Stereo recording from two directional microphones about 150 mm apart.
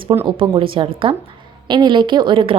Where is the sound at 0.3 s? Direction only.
35° right (ahead or behind).